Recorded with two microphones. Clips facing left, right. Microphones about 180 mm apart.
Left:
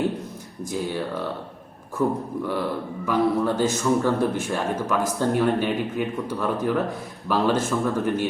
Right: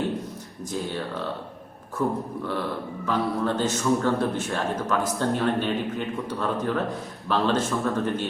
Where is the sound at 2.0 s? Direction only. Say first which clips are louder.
Left 3 dB; 15° left (ahead or behind).